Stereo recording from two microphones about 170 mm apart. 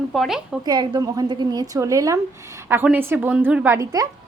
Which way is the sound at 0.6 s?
25° right (ahead or behind).